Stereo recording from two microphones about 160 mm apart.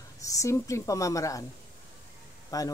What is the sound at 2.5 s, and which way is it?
Speech, 20° left (ahead or behind).